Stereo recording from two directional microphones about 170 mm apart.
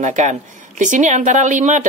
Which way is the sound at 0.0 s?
45° right (ahead or behind).